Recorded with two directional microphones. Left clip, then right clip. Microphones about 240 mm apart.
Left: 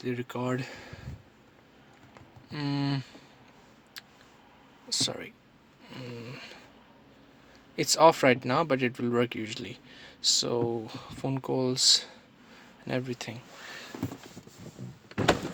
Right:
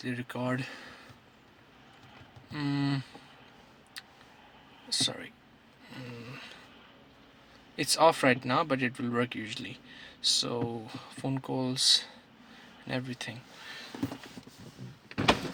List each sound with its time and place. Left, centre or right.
0.0 s speech: centre
2.5 s speech: centre
4.0 s a sound: centre
4.9 s speech: centre
7.8 s speech: centre